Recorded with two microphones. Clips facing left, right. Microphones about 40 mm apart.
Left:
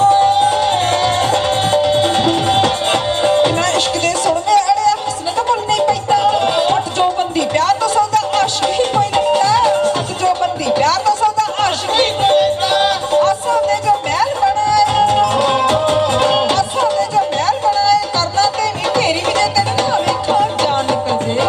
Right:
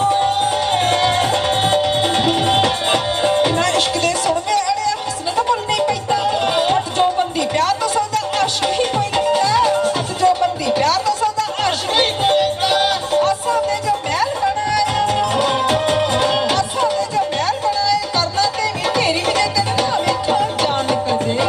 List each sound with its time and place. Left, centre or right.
0.0 s music: centre